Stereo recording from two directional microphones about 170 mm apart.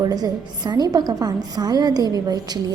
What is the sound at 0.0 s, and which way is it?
A woman's voice, 25° right (ahead or behind).